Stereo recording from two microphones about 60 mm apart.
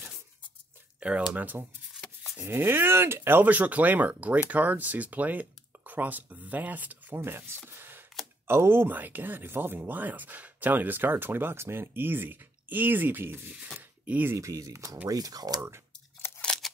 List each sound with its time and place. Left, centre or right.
0.9 s speech: right
2.4 s speech: right
7.2 s speech: right
7.6 s a sound: right
8.5 s speech: right
13.7 s a sound: right
14.3 s speech: right
15.0 s speech: right
16.2 s scissors: left
16.6 s scissors: centre